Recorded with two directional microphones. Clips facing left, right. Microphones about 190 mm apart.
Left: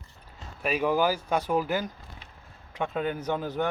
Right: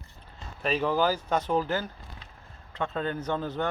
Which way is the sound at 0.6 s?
10° left (ahead or behind).